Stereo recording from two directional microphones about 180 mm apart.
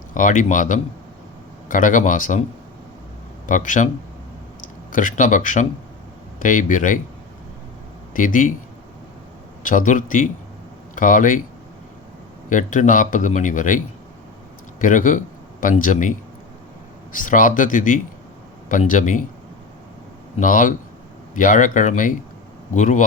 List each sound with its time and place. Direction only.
0.1 s a man's voice: 45° left (ahead or behind)
3.4 s speech: 45° left (ahead or behind)
4.9 s a man's voice: 45° left (ahead or behind)
8.1 s a man's voice: 45° left (ahead or behind)
9.6 s a man's voice: 45° left (ahead or behind)
12.5 s a man's voice: 45° left (ahead or behind)
20.4 s a man's voice: 45° left (ahead or behind)